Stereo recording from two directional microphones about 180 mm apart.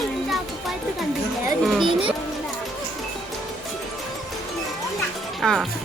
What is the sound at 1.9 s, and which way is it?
Speech, 30° right (ahead or behind).